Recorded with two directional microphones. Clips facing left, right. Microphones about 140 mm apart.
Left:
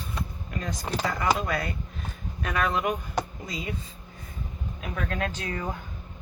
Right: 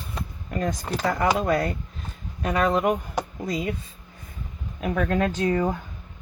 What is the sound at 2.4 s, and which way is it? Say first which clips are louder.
Speech: right 5 dB; 25° right (ahead or behind).